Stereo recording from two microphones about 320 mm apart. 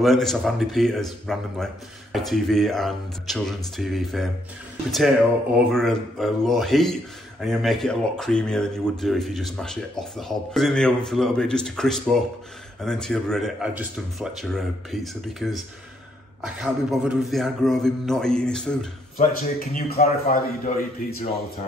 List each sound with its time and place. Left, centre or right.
0.0 s speech: centre
19.1 s a man's voice: left